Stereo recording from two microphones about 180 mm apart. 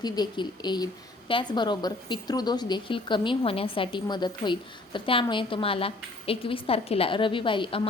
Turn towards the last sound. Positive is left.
turn(degrees=25)  # may be behind; listen again after turning